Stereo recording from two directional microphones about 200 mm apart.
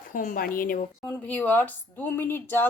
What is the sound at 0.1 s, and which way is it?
Speech, 45° left (ahead or behind).